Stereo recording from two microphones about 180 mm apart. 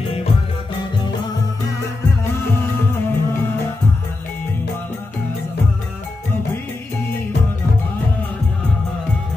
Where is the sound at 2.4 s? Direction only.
15° left (ahead or behind).